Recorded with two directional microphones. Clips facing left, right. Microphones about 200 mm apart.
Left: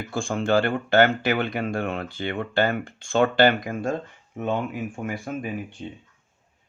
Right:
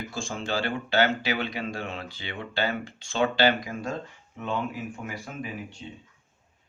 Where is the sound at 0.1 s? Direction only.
55° left (ahead or behind).